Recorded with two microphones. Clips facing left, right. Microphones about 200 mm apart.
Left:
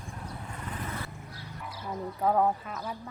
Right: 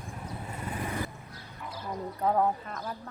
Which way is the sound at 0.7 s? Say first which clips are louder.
Right 4 dB; 15° right (ahead or behind).